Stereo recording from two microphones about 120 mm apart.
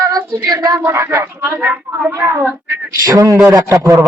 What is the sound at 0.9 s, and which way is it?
A man's voice, 25° right (ahead or behind).